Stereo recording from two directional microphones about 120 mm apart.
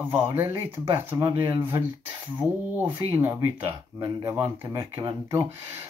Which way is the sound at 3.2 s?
20° right (ahead or behind).